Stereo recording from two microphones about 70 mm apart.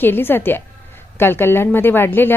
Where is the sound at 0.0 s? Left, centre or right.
Left.